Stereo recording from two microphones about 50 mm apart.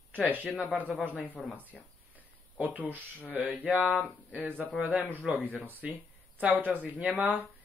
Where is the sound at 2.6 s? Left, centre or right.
Right.